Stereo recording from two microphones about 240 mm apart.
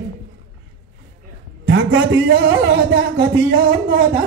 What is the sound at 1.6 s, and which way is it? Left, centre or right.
Speech, right.